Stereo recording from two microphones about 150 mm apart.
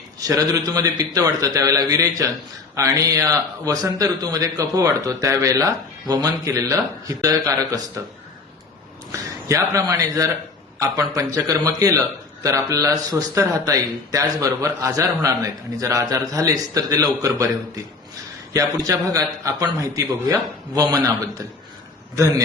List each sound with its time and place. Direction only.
0.2 s a man's voice: 25° right (ahead or behind)
9.1 s a man's voice: 20° right (ahead or behind)
18.5 s a man's voice: 25° right (ahead or behind)